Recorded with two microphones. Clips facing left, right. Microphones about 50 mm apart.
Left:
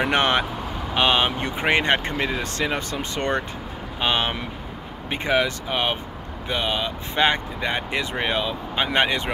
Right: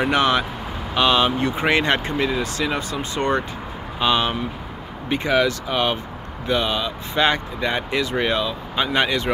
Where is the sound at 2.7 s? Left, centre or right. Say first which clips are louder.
Right 2 dB; left.